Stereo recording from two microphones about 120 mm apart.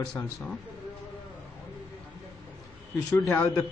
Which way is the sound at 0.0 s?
5° left (ahead or behind).